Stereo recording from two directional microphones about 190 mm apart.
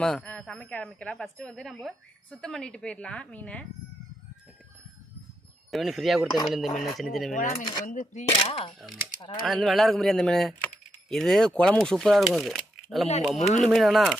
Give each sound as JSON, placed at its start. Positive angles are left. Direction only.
{"t": 0.0, "sound": "a woman's voice", "side_deg": 5}
{"t": 5.7, "sound": "speech", "side_deg": 0}
{"t": 7.6, "sound": "speech", "side_deg": 25}
{"t": 7.9, "sound": "speech", "side_deg": 40}
{"t": 8.3, "sound": "speech", "side_deg": 25}
{"t": 9.5, "sound": "speech", "side_deg": 0}